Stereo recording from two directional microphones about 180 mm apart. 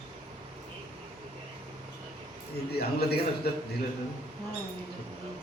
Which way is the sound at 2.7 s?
60° left (ahead or behind).